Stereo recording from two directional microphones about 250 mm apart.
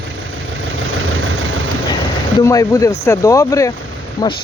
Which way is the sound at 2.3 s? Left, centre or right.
Centre.